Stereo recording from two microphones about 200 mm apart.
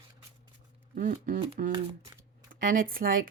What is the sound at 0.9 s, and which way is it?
Speech, 45° right (ahead or behind).